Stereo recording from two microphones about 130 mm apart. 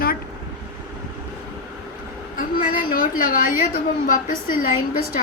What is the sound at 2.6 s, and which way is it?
A woman's voice, 90° left.